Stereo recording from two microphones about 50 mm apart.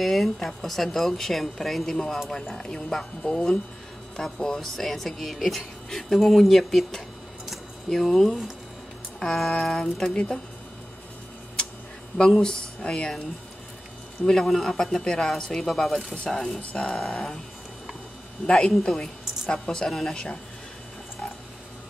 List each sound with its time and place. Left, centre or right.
0.0 s speech: centre
7.4 s a sound: centre
9.2 s speech: centre
12.4 s speech: centre
14.2 s speech: centre
18.7 s a woman's voice: centre